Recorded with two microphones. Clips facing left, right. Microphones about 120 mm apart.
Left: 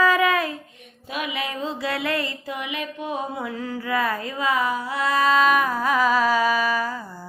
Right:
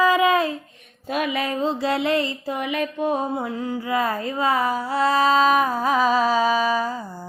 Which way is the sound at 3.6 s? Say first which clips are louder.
Even; 20° right (ahead or behind).